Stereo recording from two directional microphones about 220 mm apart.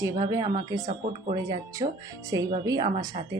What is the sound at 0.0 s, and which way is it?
Speech, 15° right (ahead or behind).